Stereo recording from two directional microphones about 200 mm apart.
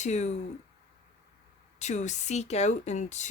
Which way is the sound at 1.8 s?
35° left (ahead or behind).